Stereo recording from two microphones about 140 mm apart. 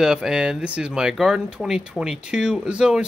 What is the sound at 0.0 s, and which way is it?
Speech, 5° right (ahead or behind).